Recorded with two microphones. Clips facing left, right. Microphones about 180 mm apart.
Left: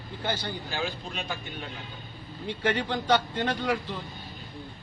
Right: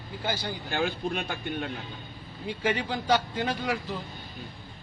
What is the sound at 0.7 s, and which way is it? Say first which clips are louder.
A man's voice: right 8 dB; 55° right (ahead or behind).